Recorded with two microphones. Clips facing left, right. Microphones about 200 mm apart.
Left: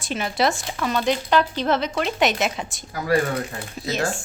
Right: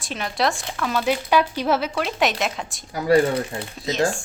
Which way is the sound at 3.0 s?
30° right (ahead or behind).